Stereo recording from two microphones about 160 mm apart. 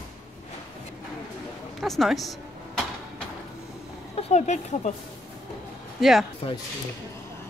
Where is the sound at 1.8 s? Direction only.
Centre (ahead or behind).